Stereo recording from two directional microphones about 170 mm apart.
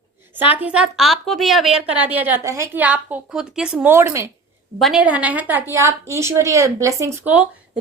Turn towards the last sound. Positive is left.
turn(degrees=-10)  # may be behind; listen again after turning